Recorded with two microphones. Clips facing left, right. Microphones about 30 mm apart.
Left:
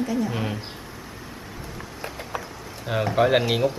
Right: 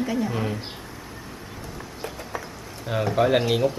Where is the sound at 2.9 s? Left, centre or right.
Centre.